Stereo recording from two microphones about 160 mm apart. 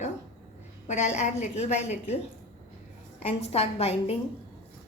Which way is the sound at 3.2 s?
40° left (ahead or behind).